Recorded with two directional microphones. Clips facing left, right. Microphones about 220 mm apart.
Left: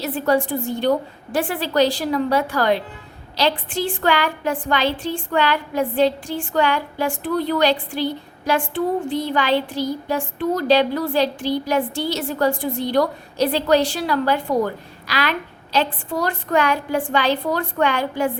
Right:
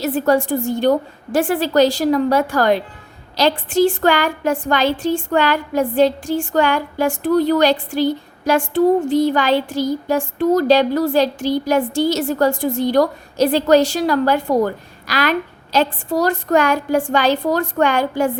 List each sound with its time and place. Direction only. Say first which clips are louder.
0.0 s a woman's voice: right 3 dB; 45° right (ahead or behind)